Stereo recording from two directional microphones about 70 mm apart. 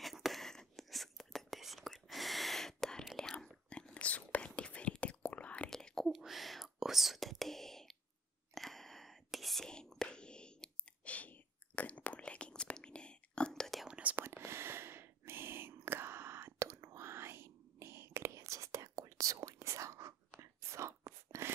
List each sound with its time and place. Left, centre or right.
0.0 s whispering: centre
5.7 s whispering: centre
6.0 s whispering: centre
13.8 s whispering: centre
14.1 s whispering: right